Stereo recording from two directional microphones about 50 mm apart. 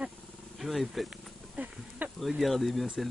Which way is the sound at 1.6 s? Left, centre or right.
Right.